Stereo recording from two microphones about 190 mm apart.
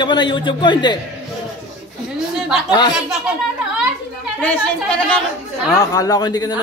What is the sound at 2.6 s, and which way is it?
Speech, 20° left (ahead or behind).